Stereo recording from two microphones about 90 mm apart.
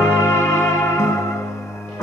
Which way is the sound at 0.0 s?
30° left (ahead or behind).